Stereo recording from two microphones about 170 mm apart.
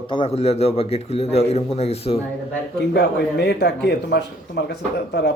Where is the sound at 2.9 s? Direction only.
75° left (ahead or behind).